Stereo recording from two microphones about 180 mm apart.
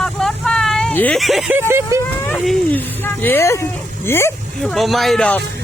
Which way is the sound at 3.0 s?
10° left (ahead or behind).